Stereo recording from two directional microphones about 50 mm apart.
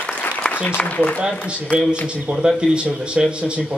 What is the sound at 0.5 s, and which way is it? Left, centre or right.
Speech, left.